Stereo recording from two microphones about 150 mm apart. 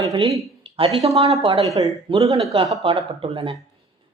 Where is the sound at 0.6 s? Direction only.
40° right (ahead or behind).